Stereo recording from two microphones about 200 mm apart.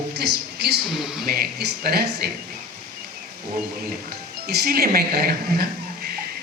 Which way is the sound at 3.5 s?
50° right (ahead or behind).